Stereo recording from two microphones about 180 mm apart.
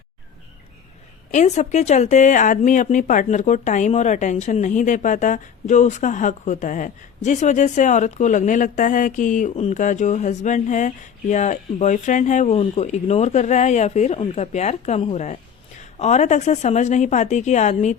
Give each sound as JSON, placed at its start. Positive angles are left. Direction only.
{"t": 1.3, "sound": "a woman's voice", "side_deg": 40}